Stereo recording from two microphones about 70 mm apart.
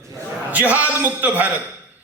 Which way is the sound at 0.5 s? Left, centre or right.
Right.